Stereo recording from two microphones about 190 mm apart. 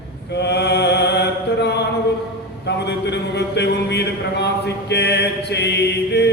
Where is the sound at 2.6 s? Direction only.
65° left (ahead or behind).